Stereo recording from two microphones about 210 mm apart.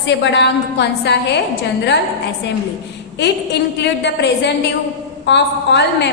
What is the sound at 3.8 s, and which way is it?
A woman's voice, 55° left (ahead or behind).